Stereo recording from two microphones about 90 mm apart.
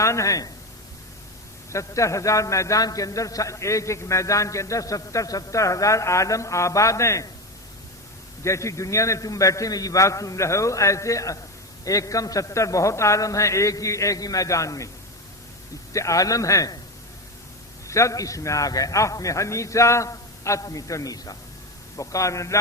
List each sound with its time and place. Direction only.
0.0 s a man's voice: 35° left (ahead or behind)
1.7 s a man's voice: 35° left (ahead or behind)
8.4 s a man's voice: 35° left (ahead or behind)
15.9 s a man's voice: 35° left (ahead or behind)
17.8 s a man's voice: 35° left (ahead or behind)